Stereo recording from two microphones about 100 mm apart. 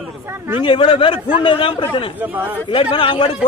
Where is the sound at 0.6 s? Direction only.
60° left (ahead or behind).